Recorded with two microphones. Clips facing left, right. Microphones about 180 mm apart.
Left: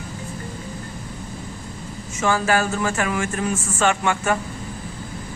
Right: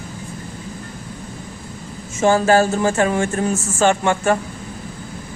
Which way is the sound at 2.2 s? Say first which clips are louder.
Right 6 dB; 30° right (ahead or behind).